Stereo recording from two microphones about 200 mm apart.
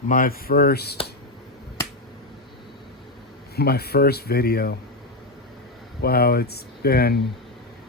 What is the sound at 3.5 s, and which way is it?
Speech, 50° left (ahead or behind).